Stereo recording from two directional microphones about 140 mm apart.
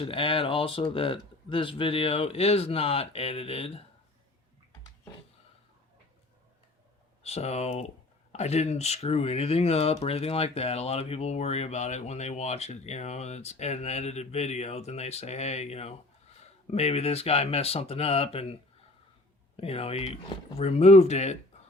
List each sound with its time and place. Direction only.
0.0 s speech: 40° left (ahead or behind)
7.2 s speech: 50° left (ahead or behind)
19.5 s speech: 45° left (ahead or behind)